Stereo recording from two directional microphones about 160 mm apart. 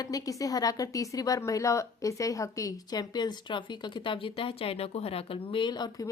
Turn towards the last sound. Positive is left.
turn(degrees=25)  # may be behind; listen again after turning